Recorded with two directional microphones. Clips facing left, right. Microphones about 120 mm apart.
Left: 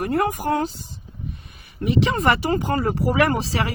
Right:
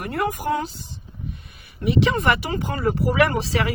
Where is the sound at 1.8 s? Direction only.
40° left (ahead or behind).